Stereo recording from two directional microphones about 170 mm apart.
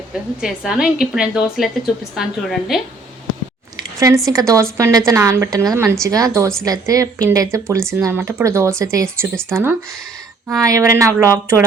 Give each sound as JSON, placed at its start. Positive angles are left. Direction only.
{"t": 0.4, "sound": "a woman's voice", "side_deg": -5}
{"t": 4.3, "sound": "a woman's voice", "side_deg": -20}